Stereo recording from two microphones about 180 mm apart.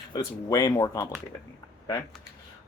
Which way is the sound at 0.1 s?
20° left (ahead or behind).